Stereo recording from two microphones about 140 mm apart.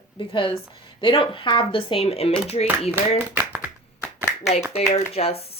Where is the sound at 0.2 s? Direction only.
35° left (ahead or behind).